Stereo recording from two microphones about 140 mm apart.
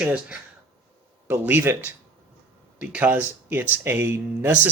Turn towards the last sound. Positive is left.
turn(degrees=-15)  # may be behind; listen again after turning